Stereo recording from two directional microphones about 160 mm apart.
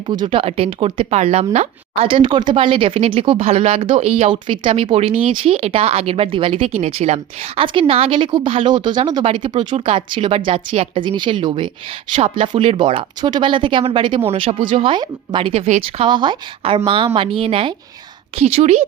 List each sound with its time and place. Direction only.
0.1 s speech: 35° right (ahead or behind)